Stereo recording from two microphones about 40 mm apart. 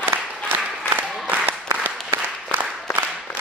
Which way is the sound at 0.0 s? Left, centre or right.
Right.